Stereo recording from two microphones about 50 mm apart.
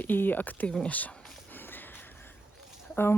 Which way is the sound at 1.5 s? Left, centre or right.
Left.